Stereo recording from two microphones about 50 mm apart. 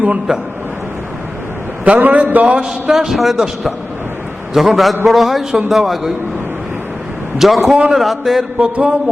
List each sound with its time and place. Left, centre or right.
0.3 s a man's voice: centre
1.8 s a man's voice: right
2.9 s a man's voice: centre
7.3 s a man's voice: centre
8.5 s speech: right